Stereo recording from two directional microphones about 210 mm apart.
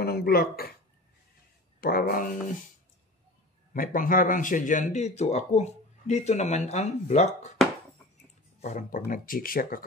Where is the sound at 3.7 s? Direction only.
40° left (ahead or behind).